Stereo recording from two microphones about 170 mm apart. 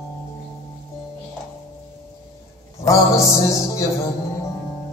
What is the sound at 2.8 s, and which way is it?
Music, 20° left (ahead or behind).